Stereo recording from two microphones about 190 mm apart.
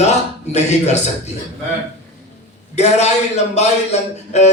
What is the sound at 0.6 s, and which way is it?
Speech, 35° left (ahead or behind).